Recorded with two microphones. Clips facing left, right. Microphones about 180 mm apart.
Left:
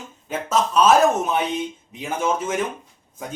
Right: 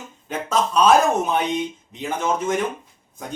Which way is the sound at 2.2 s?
5° left (ahead or behind).